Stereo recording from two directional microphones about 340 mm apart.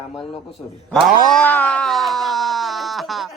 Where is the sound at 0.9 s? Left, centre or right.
Centre.